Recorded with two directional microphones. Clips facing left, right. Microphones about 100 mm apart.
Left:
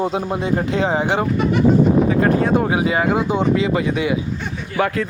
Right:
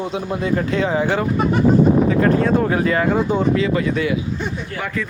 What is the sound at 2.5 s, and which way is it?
Speech, 15° left (ahead or behind).